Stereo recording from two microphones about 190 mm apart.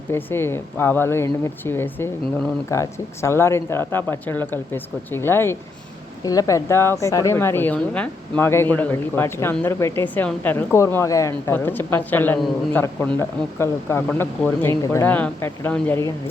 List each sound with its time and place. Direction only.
0.1 s speech: 10° left (ahead or behind)